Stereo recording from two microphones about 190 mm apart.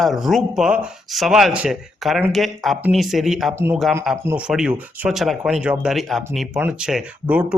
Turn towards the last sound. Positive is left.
turn(degrees=-5)  # may be behind; listen again after turning